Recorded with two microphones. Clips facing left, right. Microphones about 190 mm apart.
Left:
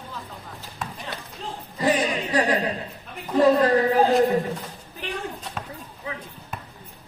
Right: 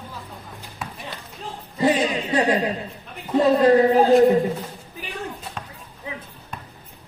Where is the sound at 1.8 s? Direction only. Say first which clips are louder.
Right 3 dB; 25° right (ahead or behind).